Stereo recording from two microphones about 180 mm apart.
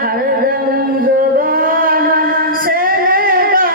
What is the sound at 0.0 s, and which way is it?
Music, 55° right (ahead or behind).